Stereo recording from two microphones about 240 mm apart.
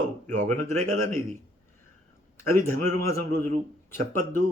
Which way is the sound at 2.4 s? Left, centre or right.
Centre.